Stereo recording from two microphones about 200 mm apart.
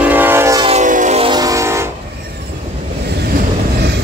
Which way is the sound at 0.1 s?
10° right (ahead or behind).